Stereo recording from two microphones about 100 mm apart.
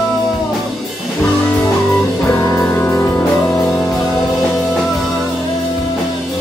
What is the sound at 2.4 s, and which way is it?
Music, 25° left (ahead or behind).